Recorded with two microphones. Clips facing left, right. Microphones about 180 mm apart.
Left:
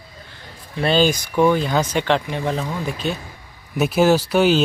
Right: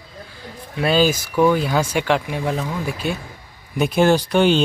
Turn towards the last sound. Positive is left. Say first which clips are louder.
# even
turn(degrees=5)  # may be behind; listen again after turning